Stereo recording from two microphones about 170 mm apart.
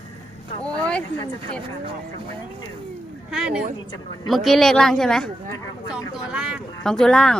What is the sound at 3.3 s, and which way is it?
Speech, 5° right (ahead or behind).